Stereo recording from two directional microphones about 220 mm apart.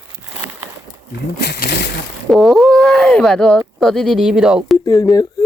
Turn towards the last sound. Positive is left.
turn(degrees=15)  # may be behind; listen again after turning